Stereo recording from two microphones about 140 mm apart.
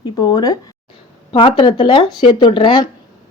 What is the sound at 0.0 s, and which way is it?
A woman's voice, 30° left (ahead or behind).